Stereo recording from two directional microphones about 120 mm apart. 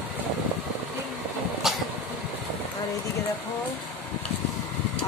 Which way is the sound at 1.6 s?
Centre (ahead or behind).